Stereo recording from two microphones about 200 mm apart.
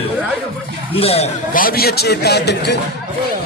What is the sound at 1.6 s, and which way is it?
A man's voice, 50° left (ahead or behind).